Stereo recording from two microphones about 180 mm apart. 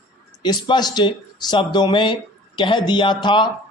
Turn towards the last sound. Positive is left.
turn(degrees=25)  # may be behind; listen again after turning